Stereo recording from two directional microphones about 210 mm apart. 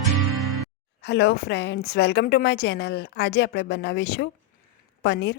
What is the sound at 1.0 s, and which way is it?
A woman's voice, 50° left (ahead or behind).